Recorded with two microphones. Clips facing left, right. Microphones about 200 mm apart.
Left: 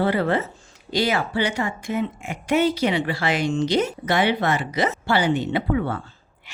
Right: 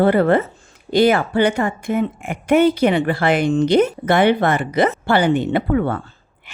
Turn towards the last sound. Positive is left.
turn(degrees=-55)  # may be behind; listen again after turning